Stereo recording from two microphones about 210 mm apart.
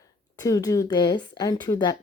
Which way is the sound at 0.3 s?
15° left (ahead or behind).